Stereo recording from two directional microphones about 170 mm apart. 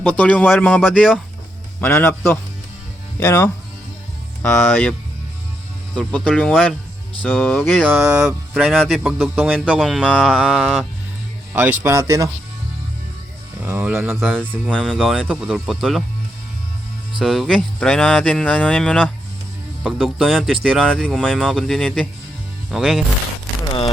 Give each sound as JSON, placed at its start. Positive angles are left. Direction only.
{"t": 0.0, "sound": "speech", "side_deg": 10}
{"t": 4.4, "sound": "speech", "side_deg": 5}
{"t": 6.0, "sound": "speech", "side_deg": 5}
{"t": 8.0, "sound": "a sound", "side_deg": -20}
{"t": 8.5, "sound": "speech", "side_deg": 0}
{"t": 13.6, "sound": "speech", "side_deg": -10}
{"t": 14.2, "sound": "speech", "side_deg": 5}
{"t": 17.2, "sound": "speech", "side_deg": 0}